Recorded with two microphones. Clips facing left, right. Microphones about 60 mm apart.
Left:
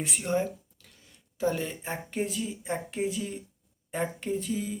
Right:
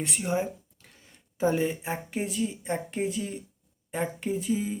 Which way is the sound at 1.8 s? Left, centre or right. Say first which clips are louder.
Even; centre.